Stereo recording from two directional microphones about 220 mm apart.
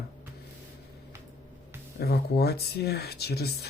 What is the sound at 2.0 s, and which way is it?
Speech, 45° left (ahead or behind).